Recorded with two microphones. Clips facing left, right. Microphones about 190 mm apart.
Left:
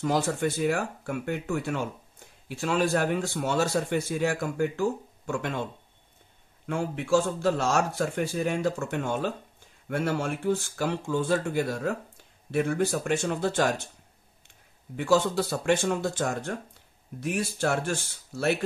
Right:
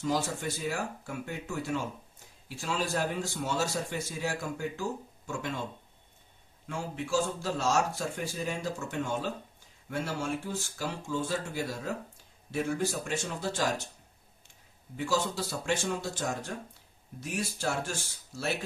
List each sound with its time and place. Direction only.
0.0 s speech: 60° left (ahead or behind)
6.6 s speech: 60° left (ahead or behind)
15.0 s speech: 60° left (ahead or behind)